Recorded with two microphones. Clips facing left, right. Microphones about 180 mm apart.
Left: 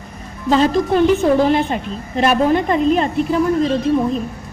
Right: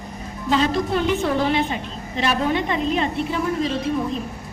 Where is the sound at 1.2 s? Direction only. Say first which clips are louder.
Left 6 dB; 45° left (ahead or behind).